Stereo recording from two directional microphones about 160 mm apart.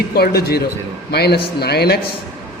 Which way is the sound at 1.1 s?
90° left.